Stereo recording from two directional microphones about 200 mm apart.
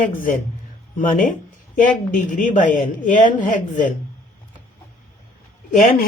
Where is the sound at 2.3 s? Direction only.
40° left (ahead or behind).